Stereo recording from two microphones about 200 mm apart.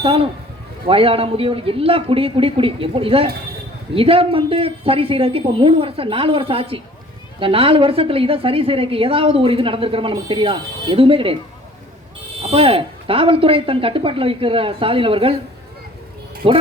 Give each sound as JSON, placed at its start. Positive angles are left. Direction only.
{"t": 0.0, "sound": "a woman's voice", "side_deg": -25}
{"t": 12.4, "sound": "a woman's voice", "side_deg": -30}
{"t": 16.4, "sound": "a woman's voice", "side_deg": -25}